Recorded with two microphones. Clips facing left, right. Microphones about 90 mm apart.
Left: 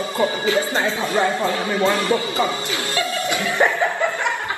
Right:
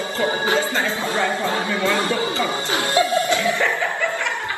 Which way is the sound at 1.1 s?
25° left (ahead or behind).